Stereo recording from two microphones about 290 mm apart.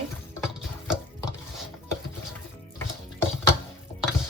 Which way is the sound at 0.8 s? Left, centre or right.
Centre.